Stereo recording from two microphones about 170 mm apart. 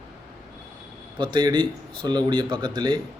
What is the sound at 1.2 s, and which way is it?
Speech, 25° right (ahead or behind).